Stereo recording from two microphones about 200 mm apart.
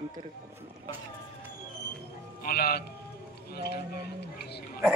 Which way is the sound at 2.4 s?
50° left (ahead or behind).